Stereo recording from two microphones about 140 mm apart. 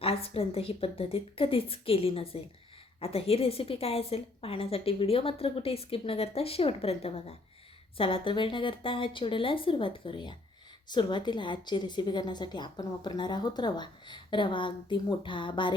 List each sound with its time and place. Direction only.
0.0 s a woman's voice: 45° left (ahead or behind)